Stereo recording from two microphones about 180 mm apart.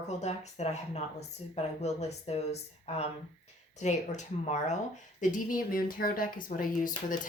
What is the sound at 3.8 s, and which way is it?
Speech, 40° left (ahead or behind).